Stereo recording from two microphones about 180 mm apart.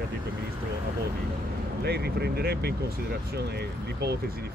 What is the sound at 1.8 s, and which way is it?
Speech, 65° right (ahead or behind).